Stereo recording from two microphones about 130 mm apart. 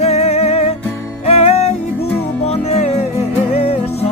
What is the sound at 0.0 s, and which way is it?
Music, 55° left (ahead or behind).